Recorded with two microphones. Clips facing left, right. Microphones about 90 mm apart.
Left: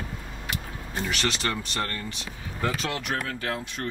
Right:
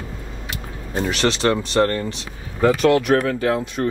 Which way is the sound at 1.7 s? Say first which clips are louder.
Right 13 dB; 45° right (ahead or behind).